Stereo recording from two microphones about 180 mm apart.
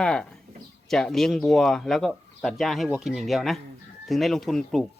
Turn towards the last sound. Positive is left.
turn(degrees=0)  # may be behind; listen again after turning